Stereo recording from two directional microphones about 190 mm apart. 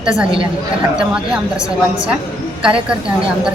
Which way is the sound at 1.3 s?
5° right (ahead or behind).